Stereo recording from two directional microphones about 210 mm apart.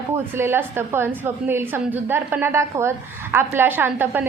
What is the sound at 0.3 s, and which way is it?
A woman's voice, 10° right (ahead or behind).